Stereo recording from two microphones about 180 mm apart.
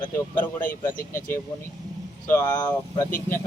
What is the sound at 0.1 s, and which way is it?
Speech, 10° left (ahead or behind).